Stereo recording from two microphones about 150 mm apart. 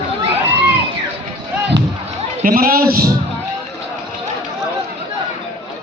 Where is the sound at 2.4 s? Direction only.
70° right (ahead or behind).